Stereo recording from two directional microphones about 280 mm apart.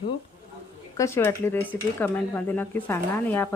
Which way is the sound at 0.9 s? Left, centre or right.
Centre.